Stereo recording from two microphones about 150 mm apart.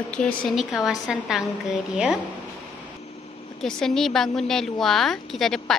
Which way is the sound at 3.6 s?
5° left (ahead or behind).